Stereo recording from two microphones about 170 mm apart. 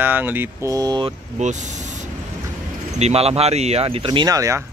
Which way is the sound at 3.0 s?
35° right (ahead or behind).